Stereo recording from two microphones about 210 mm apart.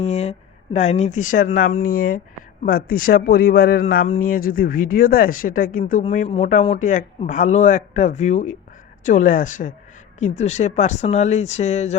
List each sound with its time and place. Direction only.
0.0 s a man's voice: 30° left (ahead or behind)